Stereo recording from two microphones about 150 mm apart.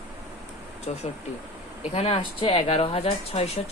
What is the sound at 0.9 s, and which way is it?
Speech, 45° left (ahead or behind).